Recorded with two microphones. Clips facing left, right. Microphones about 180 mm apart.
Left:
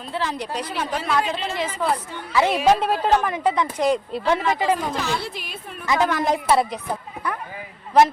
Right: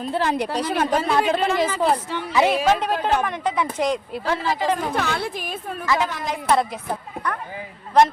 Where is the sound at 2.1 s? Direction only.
80° right.